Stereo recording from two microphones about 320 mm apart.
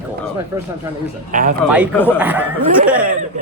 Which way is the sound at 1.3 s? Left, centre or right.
Right.